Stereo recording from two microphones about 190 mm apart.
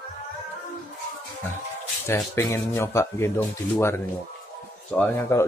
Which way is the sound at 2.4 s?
15° left (ahead or behind).